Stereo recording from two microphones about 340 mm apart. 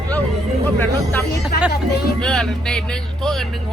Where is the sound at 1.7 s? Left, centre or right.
Left.